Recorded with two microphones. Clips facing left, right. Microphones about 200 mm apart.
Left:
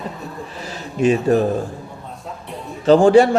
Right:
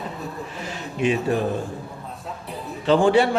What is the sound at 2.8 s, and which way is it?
Speech, 40° left (ahead or behind).